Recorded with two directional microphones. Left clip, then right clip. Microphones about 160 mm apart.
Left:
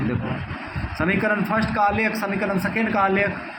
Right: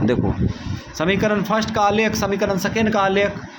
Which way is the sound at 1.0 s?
70° right (ahead or behind).